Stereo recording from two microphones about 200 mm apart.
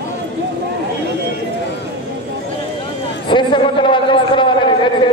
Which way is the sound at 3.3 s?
25° left (ahead or behind).